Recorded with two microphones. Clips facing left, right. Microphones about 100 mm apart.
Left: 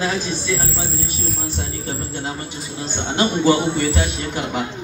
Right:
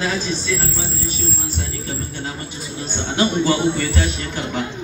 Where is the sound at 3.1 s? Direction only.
25° left (ahead or behind).